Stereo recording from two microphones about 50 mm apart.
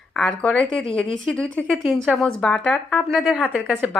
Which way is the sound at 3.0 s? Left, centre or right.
Centre.